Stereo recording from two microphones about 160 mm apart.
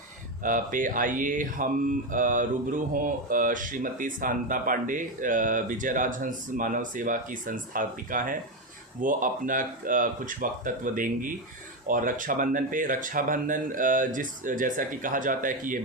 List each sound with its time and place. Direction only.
0.4 s mantra: 55° right (ahead or behind)